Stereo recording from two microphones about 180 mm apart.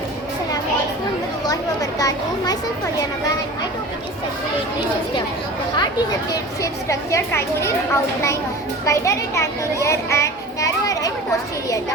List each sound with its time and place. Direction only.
1.5 s speech: 20° left (ahead or behind)
5.7 s a child's voice: 25° left (ahead or behind)